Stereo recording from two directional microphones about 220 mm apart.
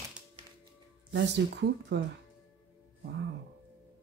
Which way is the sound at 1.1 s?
50° right (ahead or behind).